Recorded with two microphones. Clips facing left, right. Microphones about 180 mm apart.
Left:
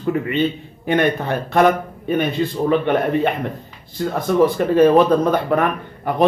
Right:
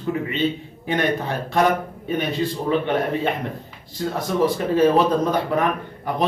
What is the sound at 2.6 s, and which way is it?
A man's voice, 60° left (ahead or behind).